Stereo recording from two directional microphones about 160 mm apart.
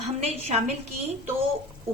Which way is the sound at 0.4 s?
45° right (ahead or behind).